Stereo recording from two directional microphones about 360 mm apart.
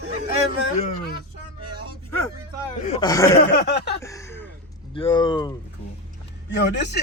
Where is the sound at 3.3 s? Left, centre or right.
Left.